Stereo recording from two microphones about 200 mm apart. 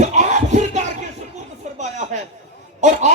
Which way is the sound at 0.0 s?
35° right (ahead or behind).